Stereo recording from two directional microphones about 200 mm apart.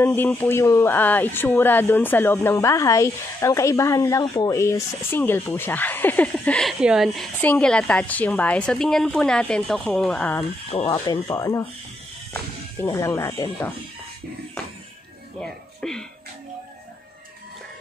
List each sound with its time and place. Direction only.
0.0 s speech: 10° left (ahead or behind)
7.3 s a woman's voice: 10° left (ahead or behind)
10.7 s speech: 25° left (ahead or behind)
12.8 s speech: 15° left (ahead or behind)
15.4 s speech: 5° left (ahead or behind)